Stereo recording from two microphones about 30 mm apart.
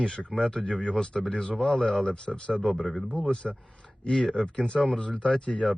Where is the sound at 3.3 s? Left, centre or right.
Left.